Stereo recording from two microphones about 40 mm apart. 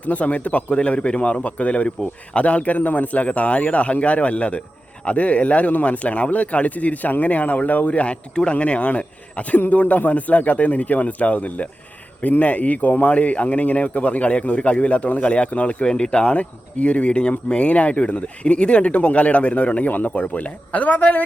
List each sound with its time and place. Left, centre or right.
0.0 s a man's voice: left
9.6 s a man's voice: left